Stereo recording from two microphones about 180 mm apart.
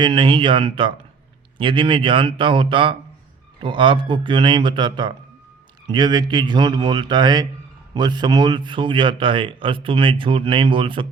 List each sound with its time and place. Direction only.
0.0 s speech: 30° right (ahead or behind)